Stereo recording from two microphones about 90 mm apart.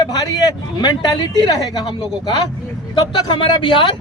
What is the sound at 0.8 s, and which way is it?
Speech, 50° left (ahead or behind).